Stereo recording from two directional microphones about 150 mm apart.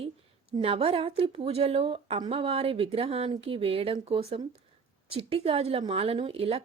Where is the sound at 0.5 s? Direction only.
40° right (ahead or behind).